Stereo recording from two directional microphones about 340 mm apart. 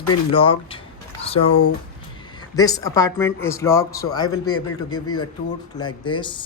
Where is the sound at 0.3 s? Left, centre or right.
Centre.